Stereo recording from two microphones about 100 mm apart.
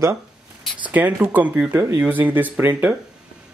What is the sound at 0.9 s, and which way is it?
Speech, 15° right (ahead or behind).